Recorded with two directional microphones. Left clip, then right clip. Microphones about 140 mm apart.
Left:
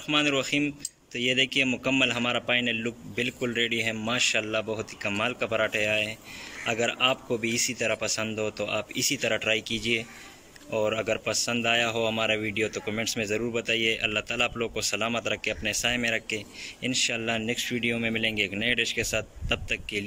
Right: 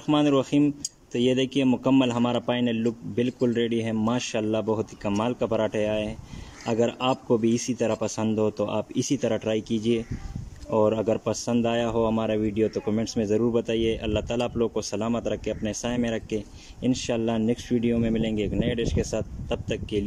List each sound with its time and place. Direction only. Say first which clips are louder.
0.0 s speech: right 3 dB; 55° right (ahead or behind)